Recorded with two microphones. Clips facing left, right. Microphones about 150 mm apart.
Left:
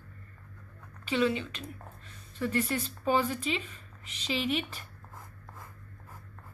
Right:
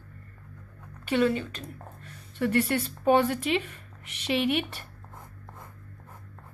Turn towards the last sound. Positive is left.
turn(degrees=-60)  # may be behind; listen again after turning